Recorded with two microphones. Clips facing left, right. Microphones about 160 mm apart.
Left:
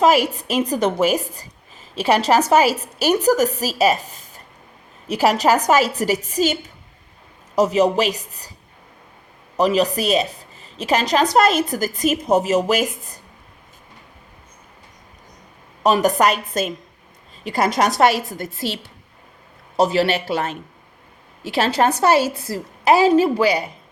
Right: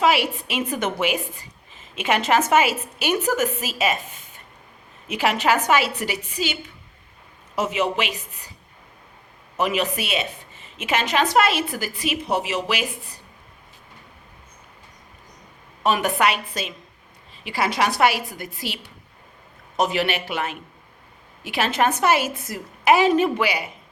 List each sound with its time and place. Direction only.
0.0 s a woman's voice: 40° left (ahead or behind)
9.6 s a woman's voice: 35° left (ahead or behind)
15.8 s a woman's voice: 40° left (ahead or behind)
18.3 s a woman's voice: 15° right (ahead or behind)
19.7 s a woman's voice: 35° left (ahead or behind)
21.8 s a woman's voice: 40° left (ahead or behind)